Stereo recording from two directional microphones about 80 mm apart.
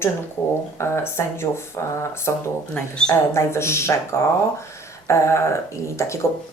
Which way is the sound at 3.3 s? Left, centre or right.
Left.